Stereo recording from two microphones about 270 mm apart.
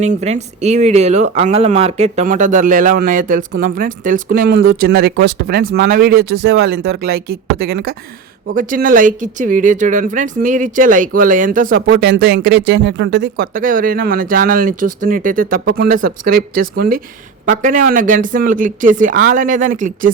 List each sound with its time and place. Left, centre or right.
0.0 s speech: right
13.3 s speech: right